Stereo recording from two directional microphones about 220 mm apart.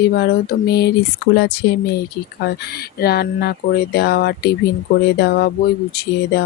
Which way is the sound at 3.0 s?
45° left (ahead or behind).